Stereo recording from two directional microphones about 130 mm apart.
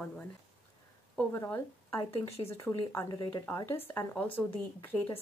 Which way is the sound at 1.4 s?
20° left (ahead or behind).